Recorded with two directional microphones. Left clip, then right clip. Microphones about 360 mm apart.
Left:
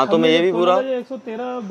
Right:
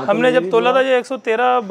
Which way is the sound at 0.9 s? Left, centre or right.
Centre.